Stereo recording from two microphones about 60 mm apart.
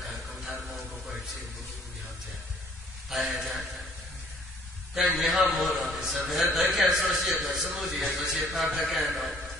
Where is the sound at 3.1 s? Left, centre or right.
Centre.